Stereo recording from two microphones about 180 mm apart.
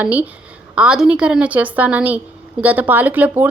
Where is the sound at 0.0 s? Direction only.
10° right (ahead or behind).